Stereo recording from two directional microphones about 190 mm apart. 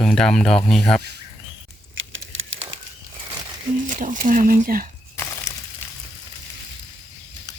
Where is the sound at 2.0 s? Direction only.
90° right.